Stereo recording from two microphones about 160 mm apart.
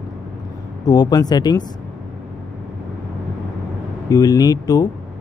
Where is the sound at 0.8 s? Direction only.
25° left (ahead or behind).